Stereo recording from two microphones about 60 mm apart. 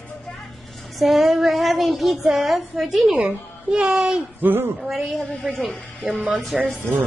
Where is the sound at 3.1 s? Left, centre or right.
Right.